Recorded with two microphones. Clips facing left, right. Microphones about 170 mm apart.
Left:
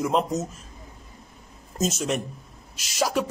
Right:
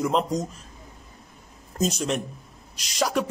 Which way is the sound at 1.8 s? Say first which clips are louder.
Even; 5° left (ahead or behind).